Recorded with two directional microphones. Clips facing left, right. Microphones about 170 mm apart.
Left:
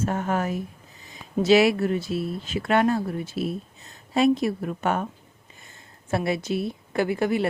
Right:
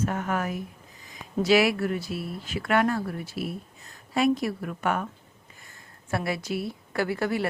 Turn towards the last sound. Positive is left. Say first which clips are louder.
# left 3 dB
turn(degrees=20)  # may be behind; listen again after turning